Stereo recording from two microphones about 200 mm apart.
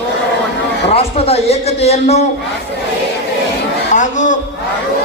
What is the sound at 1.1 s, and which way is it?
Speech, 30° left (ahead or behind).